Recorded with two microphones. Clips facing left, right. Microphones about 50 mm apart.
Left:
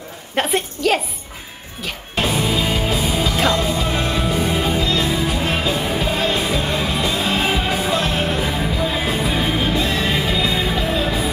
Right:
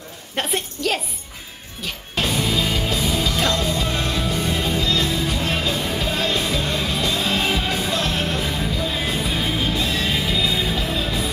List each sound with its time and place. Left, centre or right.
0.4 s a woman's voice: centre
2.1 s music: centre